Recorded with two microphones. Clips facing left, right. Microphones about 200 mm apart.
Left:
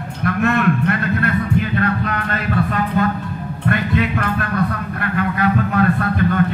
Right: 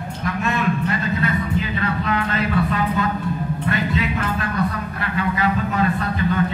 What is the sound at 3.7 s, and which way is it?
A man's voice, 55° left (ahead or behind).